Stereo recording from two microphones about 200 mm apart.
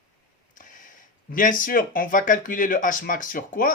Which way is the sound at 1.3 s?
40° left (ahead or behind).